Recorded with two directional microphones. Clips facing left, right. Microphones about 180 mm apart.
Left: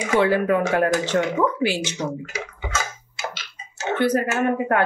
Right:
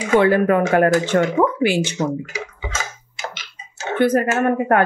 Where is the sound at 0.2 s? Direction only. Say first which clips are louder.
Right 1 dB; 55° right (ahead or behind).